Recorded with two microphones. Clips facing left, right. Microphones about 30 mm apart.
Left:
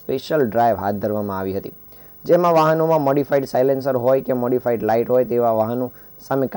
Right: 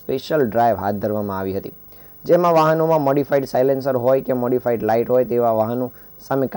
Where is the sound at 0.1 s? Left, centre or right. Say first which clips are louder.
Even; centre.